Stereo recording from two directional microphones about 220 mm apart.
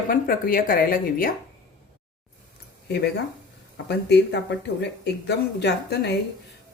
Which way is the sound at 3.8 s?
50° left (ahead or behind).